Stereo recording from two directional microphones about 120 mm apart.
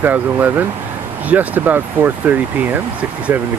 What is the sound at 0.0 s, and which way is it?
Speech, 15° right (ahead or behind).